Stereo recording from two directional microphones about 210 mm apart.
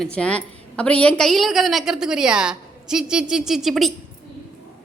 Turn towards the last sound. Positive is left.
turn(degrees=0)  # may be behind; listen again after turning